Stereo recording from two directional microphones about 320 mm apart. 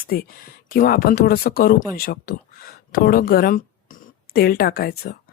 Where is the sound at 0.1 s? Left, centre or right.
Left.